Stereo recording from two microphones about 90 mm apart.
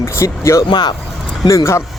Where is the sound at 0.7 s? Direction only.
55° left (ahead or behind).